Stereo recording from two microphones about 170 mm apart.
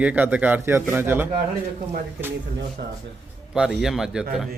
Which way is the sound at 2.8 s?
70° right (ahead or behind).